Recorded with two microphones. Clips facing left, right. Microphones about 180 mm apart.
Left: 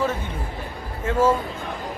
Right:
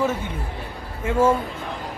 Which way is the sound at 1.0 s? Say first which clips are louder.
Right 1 dB; 10° right (ahead or behind).